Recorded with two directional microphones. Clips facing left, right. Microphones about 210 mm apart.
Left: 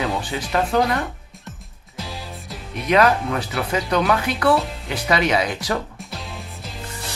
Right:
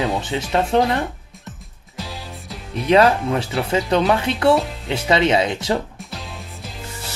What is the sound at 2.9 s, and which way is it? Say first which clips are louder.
Speech: right 3 dB; 30° right (ahead or behind).